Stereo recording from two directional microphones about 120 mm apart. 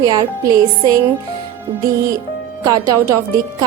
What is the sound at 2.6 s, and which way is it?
Speech, 30° right (ahead or behind).